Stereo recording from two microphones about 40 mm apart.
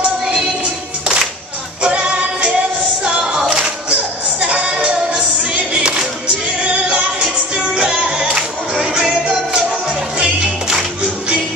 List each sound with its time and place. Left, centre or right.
1.8 s music: right
3.3 s music: centre
3.9 s music: right